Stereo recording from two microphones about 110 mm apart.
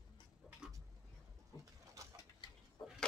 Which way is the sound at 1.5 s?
40° left (ahead or behind).